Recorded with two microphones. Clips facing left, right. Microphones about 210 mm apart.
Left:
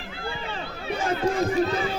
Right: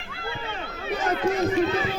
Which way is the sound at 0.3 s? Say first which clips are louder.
Even; 30° left (ahead or behind).